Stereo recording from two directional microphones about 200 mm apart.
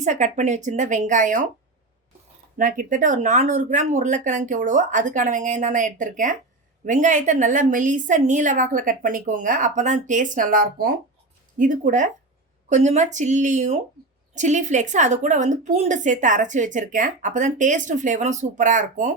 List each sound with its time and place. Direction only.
0.0 s a woman's voice: 35° right (ahead or behind)
2.6 s a woman's voice: 40° right (ahead or behind)